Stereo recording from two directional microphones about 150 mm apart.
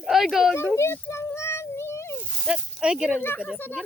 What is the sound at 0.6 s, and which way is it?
Child singing, 15° left (ahead or behind).